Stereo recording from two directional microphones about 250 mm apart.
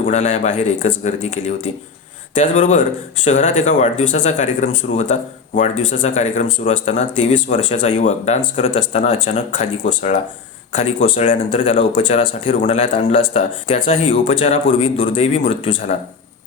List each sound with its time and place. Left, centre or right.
0.1 s speech: left
12.0 s speech: centre